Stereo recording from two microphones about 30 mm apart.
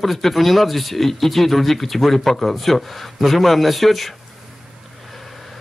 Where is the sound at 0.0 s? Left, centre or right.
Centre.